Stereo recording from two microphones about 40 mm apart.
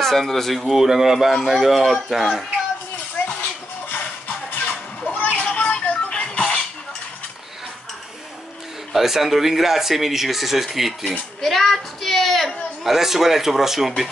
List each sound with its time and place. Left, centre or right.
0.2 s speech: centre
0.7 s speech: centre
3.9 s music: left
5.0 s children playing: left
5.9 s music: left
8.9 s speech: centre
11.4 s a sound: centre
12.8 s speech: centre